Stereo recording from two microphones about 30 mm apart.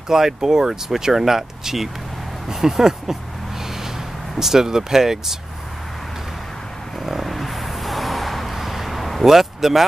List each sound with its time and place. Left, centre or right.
0.1 s speech: centre
4.4 s speech: centre
7.1 s vehicle: centre
9.2 s speech: centre